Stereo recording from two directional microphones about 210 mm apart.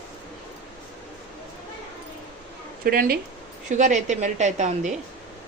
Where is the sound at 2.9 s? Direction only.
45° right (ahead or behind).